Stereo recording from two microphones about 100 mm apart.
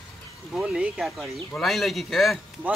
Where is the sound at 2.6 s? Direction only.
15° right (ahead or behind).